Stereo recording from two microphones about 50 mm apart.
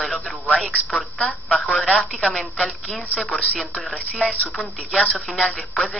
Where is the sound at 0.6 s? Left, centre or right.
Centre.